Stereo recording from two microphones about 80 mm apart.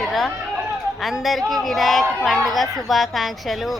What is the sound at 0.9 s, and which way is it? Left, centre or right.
A man's voice, centre.